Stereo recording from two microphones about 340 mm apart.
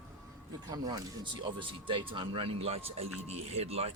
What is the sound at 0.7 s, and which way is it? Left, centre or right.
Speech, centre.